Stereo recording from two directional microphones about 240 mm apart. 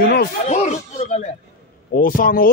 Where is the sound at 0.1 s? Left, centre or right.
Left.